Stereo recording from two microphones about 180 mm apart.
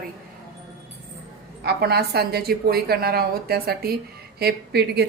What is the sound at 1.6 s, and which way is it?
A woman's voice, 60° right (ahead or behind).